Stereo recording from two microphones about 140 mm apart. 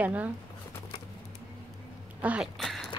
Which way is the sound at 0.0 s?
10° right (ahead or behind).